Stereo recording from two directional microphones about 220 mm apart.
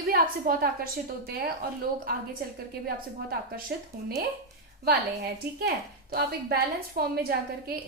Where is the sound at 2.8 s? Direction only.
45° right (ahead or behind).